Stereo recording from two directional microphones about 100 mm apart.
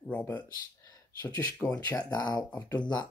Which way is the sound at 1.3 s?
40° left (ahead or behind).